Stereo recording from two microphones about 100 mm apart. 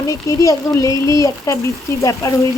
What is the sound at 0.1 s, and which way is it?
A woman's voice, 35° left (ahead or behind).